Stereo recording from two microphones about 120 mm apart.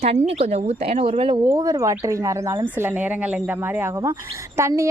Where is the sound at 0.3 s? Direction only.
65° right (ahead or behind).